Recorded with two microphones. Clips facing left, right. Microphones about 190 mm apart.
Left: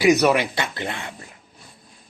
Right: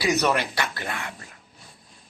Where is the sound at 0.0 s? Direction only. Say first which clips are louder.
Left 6 dB; 15° left (ahead or behind).